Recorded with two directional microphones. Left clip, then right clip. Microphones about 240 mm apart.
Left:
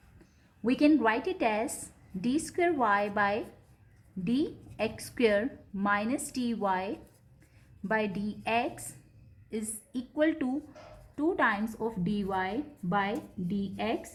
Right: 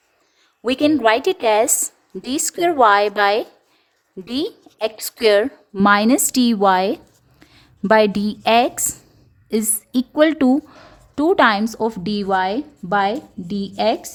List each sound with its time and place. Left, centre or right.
0.6 s a woman's voice: right